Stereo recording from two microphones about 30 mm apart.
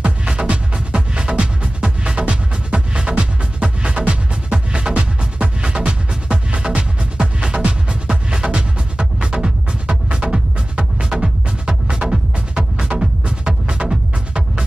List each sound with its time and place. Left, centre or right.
0.0 s music: right
1.8 s music: right
2.2 s music: right
10.0 s music: right
11.0 s music: right